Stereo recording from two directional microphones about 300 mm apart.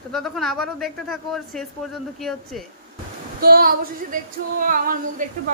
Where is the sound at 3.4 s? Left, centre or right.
Right.